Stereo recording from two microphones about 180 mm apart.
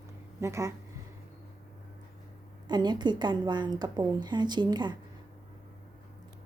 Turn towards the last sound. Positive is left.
turn(degrees=-25)  # may be behind; listen again after turning